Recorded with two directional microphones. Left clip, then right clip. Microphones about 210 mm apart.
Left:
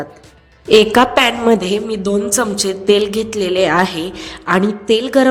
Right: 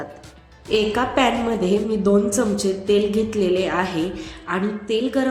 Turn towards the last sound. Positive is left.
turn(degrees=45)  # may be behind; listen again after turning